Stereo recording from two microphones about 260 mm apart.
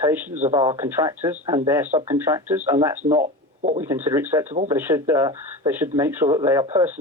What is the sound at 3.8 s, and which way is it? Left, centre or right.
Speech, centre.